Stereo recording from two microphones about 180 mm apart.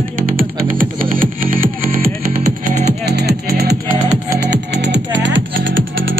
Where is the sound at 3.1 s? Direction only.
60° right (ahead or behind).